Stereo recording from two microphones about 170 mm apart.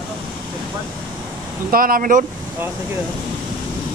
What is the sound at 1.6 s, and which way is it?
Speech, 55° right (ahead or behind).